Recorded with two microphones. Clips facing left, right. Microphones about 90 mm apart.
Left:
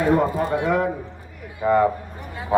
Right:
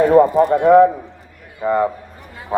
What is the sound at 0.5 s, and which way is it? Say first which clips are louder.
Speech: right 14 dB; 45° right (ahead or behind).